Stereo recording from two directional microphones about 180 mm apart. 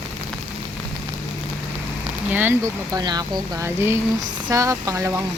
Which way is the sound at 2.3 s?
10° right (ahead or behind).